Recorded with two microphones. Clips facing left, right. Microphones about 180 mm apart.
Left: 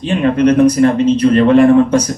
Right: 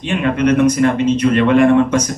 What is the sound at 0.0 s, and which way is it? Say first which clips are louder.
A man's voice: left 4 dB; 35° left (ahead or behind).